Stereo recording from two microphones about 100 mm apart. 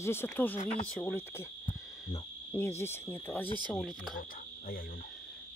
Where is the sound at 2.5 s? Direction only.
25° left (ahead or behind).